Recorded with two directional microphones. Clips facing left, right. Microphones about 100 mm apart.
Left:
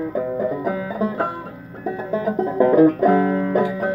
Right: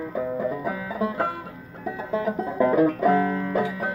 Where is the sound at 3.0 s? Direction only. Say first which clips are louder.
Left 4 dB; 15° left (ahead or behind).